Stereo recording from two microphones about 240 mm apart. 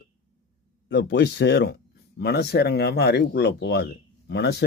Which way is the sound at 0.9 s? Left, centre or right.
Left.